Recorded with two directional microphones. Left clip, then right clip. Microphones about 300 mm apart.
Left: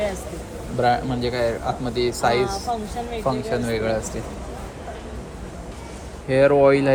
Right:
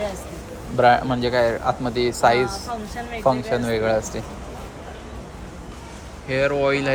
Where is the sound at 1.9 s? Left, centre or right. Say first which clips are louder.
Right 2 dB; centre.